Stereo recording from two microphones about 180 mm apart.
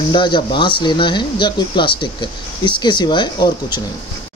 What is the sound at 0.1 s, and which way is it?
Speech, 25° left (ahead or behind).